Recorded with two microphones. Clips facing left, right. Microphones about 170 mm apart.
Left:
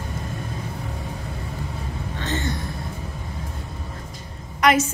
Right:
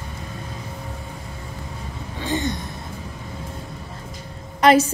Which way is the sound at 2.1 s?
15° right (ahead or behind).